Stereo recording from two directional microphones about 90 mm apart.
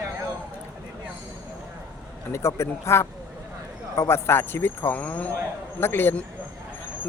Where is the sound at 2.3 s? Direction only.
30° left (ahead or behind).